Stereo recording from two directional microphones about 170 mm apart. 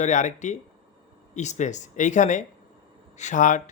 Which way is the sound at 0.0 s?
45° left (ahead or behind).